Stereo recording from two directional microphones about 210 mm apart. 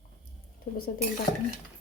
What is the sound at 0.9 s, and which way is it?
Speech, 45° left (ahead or behind).